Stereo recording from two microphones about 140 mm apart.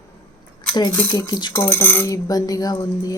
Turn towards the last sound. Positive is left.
turn(degrees=25)  # may be behind; listen again after turning